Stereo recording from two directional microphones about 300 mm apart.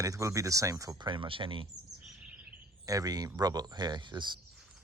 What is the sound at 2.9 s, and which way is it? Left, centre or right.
Speech, centre.